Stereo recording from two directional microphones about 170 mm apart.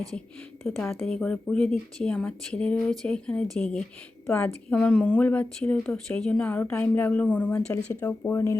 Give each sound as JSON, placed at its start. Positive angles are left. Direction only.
{"t": 0.6, "sound": "a woman's voice", "side_deg": 10}